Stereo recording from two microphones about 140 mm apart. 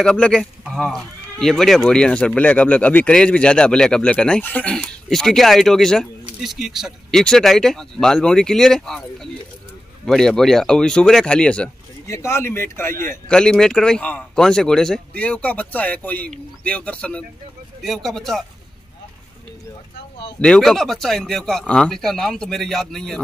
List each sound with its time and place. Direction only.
0.0 s speech: 5° left (ahead or behind)
12.1 s speech: 20° left (ahead or behind)
13.3 s speech: 5° left (ahead or behind)
20.3 s speech: 5° left (ahead or behind)